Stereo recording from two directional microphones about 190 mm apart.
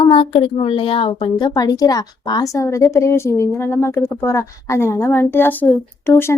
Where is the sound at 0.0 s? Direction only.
30° left (ahead or behind).